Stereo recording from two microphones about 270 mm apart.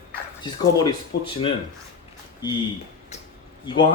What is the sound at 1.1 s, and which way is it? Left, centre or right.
Speech, left.